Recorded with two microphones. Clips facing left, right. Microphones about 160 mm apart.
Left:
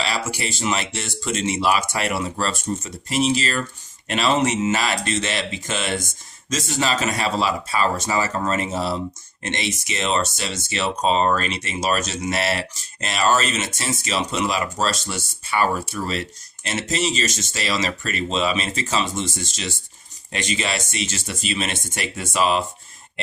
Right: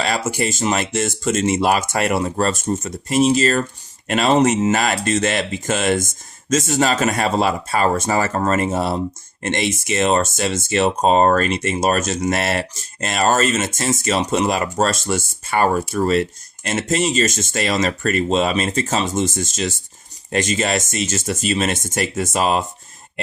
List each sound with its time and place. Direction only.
0.0 s speech: 50° right (ahead or behind)